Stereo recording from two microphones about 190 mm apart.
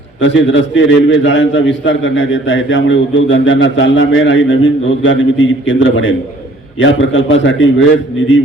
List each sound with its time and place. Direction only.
0.2 s a man's voice: 70° left (ahead or behind)